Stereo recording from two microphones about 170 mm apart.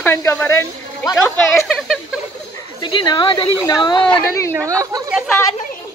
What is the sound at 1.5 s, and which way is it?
Speech, centre (ahead or behind).